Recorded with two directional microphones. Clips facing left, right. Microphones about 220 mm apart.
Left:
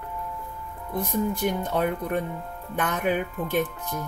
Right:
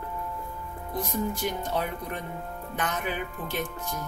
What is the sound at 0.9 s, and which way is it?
Speech, 55° left (ahead or behind).